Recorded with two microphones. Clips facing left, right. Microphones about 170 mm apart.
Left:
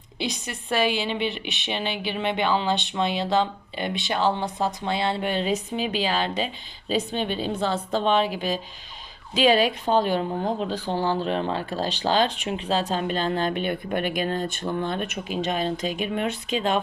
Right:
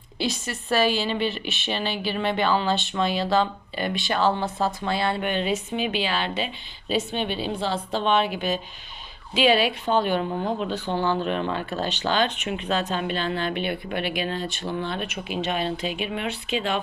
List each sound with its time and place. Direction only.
0.2 s a woman's voice: 15° left (ahead or behind); by 16.8 s 40° left (ahead or behind)